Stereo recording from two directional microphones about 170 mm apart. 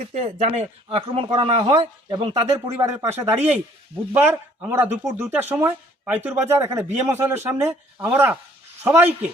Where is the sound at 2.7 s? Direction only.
15° right (ahead or behind).